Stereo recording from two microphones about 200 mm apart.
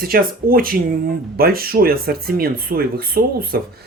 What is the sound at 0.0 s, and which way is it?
Speech, 45° right (ahead or behind).